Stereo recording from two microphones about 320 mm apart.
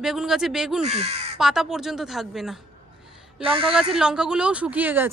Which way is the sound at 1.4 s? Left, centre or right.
Centre.